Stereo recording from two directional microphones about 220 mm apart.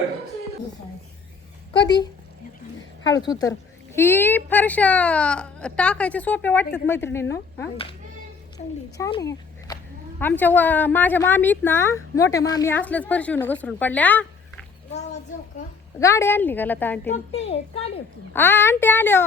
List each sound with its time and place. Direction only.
1.7 s a child's voice: 20° left (ahead or behind)
3.2 s a woman's voice: 15° left (ahead or behind)
8.6 s speech: 35° left (ahead or behind)
9.0 s speech: 20° left (ahead or behind)
10.2 s a woman's voice: 10° left (ahead or behind)
16.0 s a woman's voice: 15° left (ahead or behind)
17.1 s a child's voice: 30° left (ahead or behind)
18.3 s a woman's voice: 10° left (ahead or behind)